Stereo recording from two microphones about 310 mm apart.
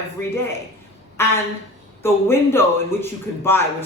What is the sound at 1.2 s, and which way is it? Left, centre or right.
Speech, centre.